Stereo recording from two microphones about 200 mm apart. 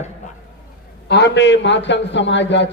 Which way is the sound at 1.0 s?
60° left (ahead or behind).